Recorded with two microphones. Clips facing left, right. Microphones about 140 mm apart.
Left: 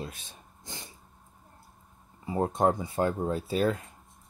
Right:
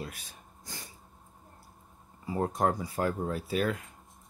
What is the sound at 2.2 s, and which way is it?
Speech, 25° left (ahead or behind).